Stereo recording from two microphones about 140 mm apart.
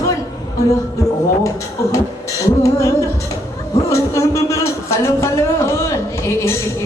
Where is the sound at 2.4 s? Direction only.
20° left (ahead or behind).